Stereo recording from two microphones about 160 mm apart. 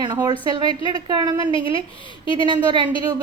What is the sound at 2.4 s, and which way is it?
Speech, 30° right (ahead or behind).